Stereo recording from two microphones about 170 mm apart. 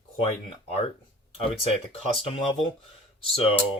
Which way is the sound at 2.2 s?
30° left (ahead or behind).